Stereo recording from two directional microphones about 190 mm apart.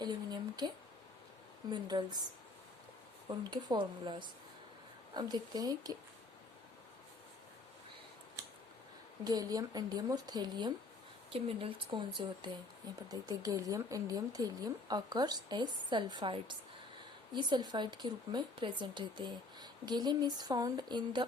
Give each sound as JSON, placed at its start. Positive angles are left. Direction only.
{"t": 0.0, "sound": "a sound", "side_deg": -20}
{"t": 1.7, "sound": "a woman's voice", "side_deg": -20}
{"t": 3.2, "sound": "a woman's voice", "side_deg": -20}
{"t": 9.2, "sound": "a woman's voice", "side_deg": -20}